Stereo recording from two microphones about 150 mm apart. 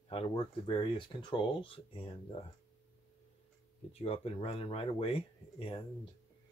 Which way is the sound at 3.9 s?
40° left (ahead or behind).